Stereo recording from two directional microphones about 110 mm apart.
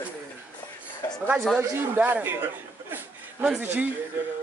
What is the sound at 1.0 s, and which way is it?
Speech, 35° left (ahead or behind).